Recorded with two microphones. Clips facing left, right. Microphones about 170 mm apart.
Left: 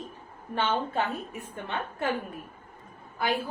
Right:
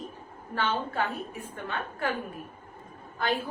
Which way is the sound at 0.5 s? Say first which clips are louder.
Left 1 dB; 20° left (ahead or behind).